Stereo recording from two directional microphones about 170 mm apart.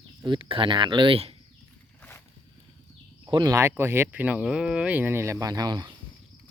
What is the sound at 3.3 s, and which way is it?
Speech, 25° right (ahead or behind).